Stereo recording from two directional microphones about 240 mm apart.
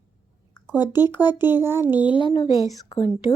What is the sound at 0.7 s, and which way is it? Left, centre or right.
Speech, centre.